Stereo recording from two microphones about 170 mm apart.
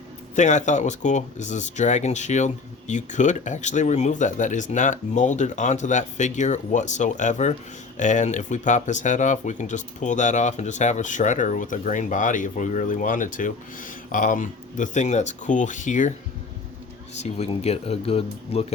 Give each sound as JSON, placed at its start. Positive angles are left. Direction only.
{"t": 0.3, "sound": "speech", "side_deg": 45}
{"t": 17.2, "sound": "speech", "side_deg": 40}